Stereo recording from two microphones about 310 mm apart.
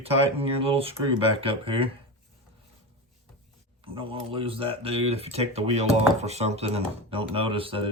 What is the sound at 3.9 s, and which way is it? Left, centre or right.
Speech, centre.